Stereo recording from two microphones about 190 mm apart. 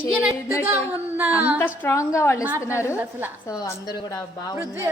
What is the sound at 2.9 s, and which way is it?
Speech, 10° right (ahead or behind).